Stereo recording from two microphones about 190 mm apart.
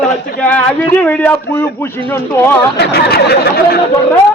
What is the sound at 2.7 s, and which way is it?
Speech, 60° left (ahead or behind).